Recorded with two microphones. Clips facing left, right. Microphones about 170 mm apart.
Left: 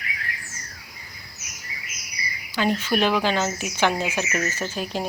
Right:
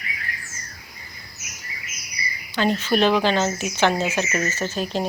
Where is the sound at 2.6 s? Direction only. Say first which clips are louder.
Right 2 dB; 10° left (ahead or behind).